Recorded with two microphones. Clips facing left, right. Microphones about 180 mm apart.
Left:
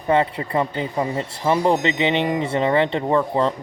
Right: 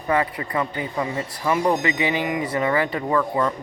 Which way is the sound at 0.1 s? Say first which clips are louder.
Left 3 dB; 25° left (ahead or behind).